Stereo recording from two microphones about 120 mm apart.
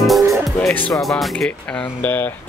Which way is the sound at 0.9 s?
Centre (ahead or behind).